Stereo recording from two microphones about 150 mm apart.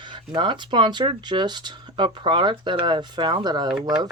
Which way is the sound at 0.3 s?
30° right (ahead or behind).